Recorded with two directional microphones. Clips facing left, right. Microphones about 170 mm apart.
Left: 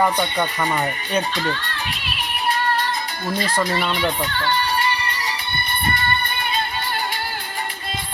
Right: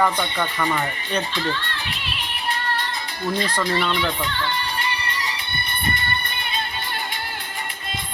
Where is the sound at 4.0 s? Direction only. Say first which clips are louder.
Left 2 dB; 40° left (ahead or behind).